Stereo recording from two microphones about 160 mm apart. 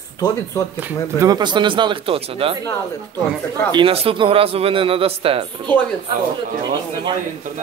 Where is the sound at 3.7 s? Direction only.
35° right (ahead or behind).